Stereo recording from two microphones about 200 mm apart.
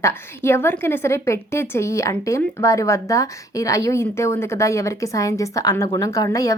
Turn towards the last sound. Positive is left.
turn(degrees=15)  # may be behind; listen again after turning